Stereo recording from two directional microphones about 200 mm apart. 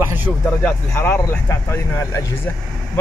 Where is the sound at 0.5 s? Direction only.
10° left (ahead or behind).